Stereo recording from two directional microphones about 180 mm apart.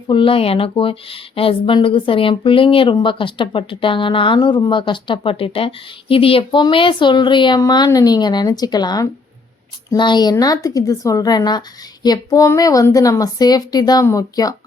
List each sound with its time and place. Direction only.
0.1 s speech: 30° left (ahead or behind)